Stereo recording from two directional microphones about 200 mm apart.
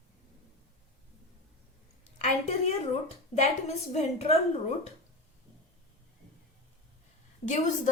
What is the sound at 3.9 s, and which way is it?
A woman's voice, 35° left (ahead or behind).